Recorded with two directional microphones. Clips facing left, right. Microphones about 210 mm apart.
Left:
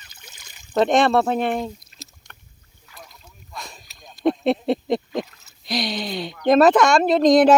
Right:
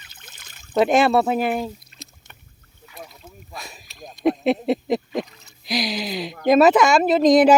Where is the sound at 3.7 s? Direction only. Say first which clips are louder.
Right 5 dB; centre (ahead or behind).